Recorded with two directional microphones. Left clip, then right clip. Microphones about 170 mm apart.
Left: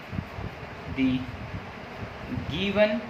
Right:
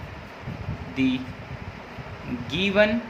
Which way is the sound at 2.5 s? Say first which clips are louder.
Right 3 dB; 55° right (ahead or behind).